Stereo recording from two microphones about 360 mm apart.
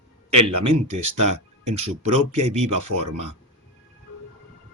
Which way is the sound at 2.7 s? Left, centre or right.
Right.